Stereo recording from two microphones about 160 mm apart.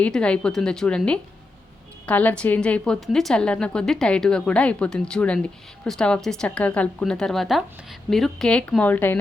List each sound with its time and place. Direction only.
0.0 s a woman's voice: 5° left (ahead or behind)